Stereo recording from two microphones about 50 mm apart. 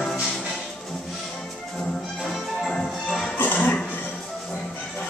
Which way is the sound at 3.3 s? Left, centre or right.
Left.